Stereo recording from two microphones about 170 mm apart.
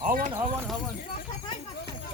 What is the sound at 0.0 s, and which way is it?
Speech, 50° right (ahead or behind).